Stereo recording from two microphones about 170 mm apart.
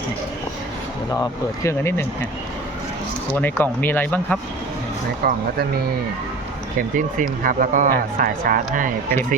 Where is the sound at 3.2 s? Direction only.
10° left (ahead or behind).